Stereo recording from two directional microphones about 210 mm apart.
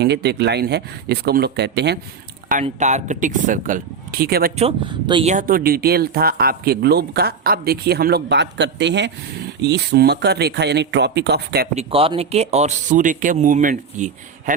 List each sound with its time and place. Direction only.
0.0 s speech: 50° right (ahead or behind)
2.5 s speech: 35° right (ahead or behind)
4.5 s speech: 25° right (ahead or behind)
5.3 s speech: 40° right (ahead or behind)
11.7 s speech: 30° right (ahead or behind)